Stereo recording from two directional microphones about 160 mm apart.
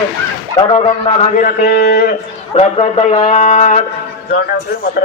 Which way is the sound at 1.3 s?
65° left (ahead or behind).